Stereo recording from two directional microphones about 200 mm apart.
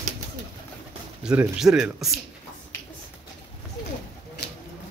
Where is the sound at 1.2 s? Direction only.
5° right (ahead or behind).